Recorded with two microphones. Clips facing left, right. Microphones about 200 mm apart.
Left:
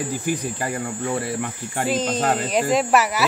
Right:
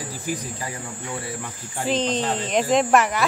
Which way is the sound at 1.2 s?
65° left (ahead or behind).